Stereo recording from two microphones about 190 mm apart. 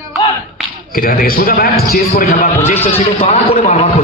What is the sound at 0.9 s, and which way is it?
A man's voice, 50° left (ahead or behind).